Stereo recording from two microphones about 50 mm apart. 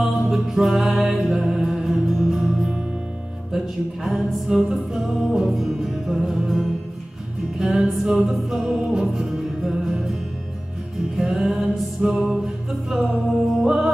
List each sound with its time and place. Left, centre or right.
0.3 s music: centre
11.2 s music: centre
13.3 s music: centre